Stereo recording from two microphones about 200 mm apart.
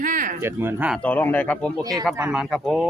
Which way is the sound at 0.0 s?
40° right (ahead or behind).